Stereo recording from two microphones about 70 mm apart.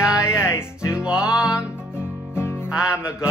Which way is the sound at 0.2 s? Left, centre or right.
Left.